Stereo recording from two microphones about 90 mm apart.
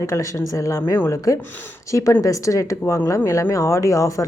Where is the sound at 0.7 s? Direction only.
30° left (ahead or behind).